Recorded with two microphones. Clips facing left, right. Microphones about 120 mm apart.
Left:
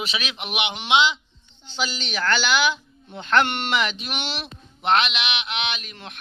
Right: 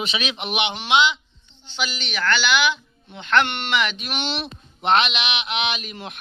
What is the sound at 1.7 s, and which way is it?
Speech, 35° left (ahead or behind).